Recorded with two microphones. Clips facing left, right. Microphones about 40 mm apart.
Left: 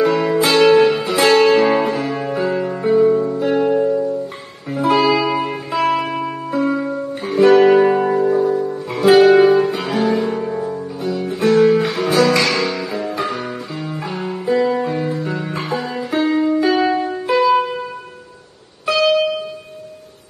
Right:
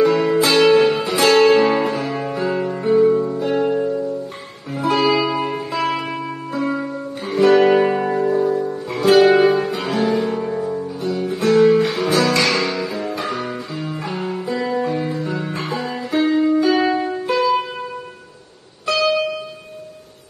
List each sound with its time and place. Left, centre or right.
0.0 s music: centre
3.3 s music: centre
3.6 s music: centre
18.9 s music: centre